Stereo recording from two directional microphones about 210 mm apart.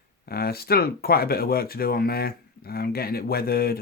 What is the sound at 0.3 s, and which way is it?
Speech, 45° left (ahead or behind).